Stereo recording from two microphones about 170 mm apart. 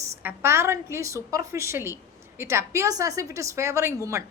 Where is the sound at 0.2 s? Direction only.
15° right (ahead or behind).